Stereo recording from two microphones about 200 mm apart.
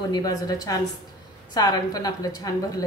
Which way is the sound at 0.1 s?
20° left (ahead or behind).